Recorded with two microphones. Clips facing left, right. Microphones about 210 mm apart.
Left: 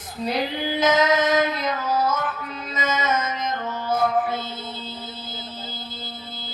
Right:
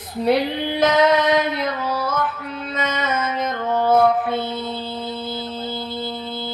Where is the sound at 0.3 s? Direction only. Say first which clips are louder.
Right 6 dB; 60° right (ahead or behind).